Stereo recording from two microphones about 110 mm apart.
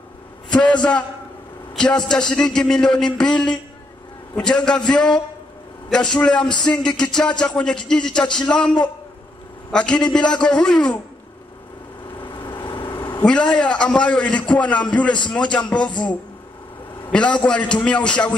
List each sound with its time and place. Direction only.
0.5 s a man's voice: 10° left (ahead or behind)
4.4 s a man's voice: 5° left (ahead or behind)
12.2 s vehicle: 45° left (ahead or behind)
13.2 s a man's voice: 10° left (ahead or behind)
15.9 s speech: 45° left (ahead or behind)
17.0 s a man's voice: 10° left (ahead or behind)